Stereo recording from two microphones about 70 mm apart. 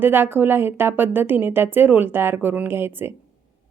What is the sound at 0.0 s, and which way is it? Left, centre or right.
A woman's voice, right.